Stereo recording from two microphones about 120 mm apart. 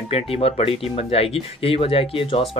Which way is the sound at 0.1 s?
55° left (ahead or behind).